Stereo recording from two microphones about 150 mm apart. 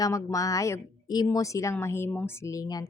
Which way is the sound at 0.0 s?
20° left (ahead or behind).